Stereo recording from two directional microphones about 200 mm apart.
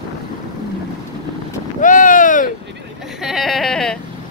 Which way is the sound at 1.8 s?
40° left (ahead or behind).